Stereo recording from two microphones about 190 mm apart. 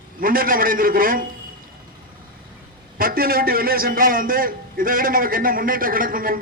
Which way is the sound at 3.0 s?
50° right (ahead or behind).